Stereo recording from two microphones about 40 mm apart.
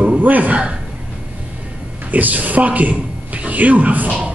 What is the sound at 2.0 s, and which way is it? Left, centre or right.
A man's voice, right.